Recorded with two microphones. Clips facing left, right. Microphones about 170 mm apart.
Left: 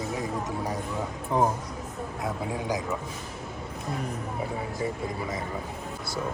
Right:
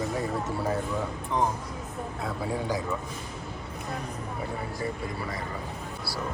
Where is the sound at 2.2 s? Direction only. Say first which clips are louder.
Even; 20° left (ahead or behind).